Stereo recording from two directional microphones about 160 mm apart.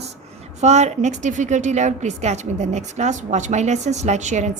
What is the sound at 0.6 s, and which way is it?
A woman's voice, 45° right (ahead or behind).